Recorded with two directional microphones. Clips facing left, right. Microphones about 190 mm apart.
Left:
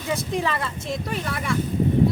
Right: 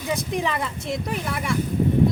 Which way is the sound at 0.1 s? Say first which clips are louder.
Even; 15° right (ahead or behind).